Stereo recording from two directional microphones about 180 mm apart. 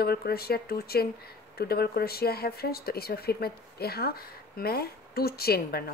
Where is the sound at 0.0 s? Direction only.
60° left (ahead or behind).